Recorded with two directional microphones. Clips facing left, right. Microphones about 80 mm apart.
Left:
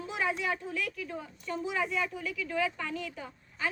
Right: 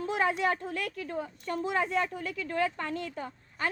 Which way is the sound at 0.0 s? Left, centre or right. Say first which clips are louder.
Right 4 dB; right.